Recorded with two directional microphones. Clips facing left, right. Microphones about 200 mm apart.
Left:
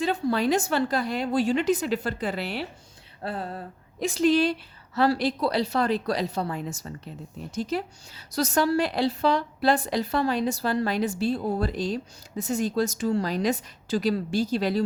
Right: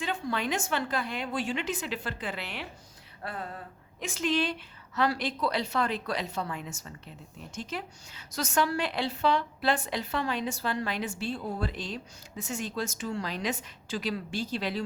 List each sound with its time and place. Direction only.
0.0 s a woman's voice: 35° left (ahead or behind)